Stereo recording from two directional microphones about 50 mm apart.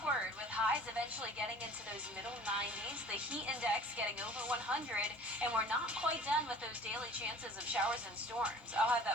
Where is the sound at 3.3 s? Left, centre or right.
Right.